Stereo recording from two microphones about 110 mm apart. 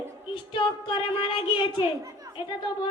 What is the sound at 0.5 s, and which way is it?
Child singing, 45° left (ahead or behind).